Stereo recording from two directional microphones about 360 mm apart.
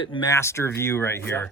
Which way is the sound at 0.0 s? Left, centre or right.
Centre.